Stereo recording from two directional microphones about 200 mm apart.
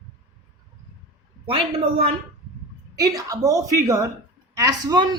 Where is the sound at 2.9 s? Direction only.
20° right (ahead or behind).